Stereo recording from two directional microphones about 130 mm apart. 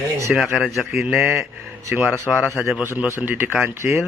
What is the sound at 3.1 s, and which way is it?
Speech, 15° right (ahead or behind).